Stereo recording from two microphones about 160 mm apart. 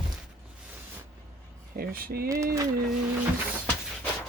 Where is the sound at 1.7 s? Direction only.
70° right (ahead or behind).